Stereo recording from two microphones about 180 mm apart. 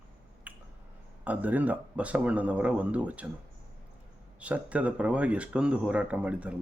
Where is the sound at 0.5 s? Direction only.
10° right (ahead or behind).